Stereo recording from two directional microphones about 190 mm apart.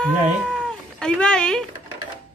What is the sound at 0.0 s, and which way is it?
Speech, 5° left (ahead or behind).